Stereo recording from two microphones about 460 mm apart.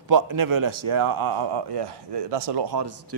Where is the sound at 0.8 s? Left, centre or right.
Right.